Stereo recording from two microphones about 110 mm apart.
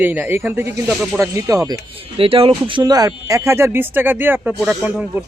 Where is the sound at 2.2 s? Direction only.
55° right (ahead or behind).